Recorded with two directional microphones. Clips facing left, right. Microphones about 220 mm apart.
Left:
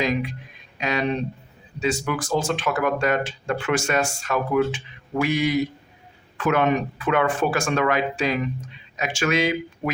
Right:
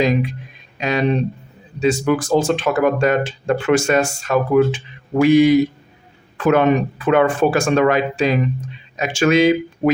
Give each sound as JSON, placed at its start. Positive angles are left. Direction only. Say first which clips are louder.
{"t": 0.0, "sound": "speech", "louder": "right 6 dB", "side_deg": -30}